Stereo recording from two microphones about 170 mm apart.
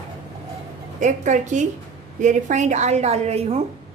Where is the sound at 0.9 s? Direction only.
45° right (ahead or behind).